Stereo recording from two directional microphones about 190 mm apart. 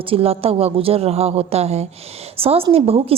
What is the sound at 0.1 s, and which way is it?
A woman's voice, 30° right (ahead or behind).